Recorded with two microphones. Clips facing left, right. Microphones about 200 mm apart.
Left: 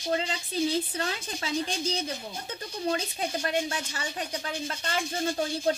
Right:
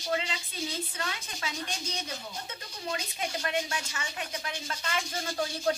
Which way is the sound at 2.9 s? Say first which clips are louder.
Left 4 dB; 35° left (ahead or behind).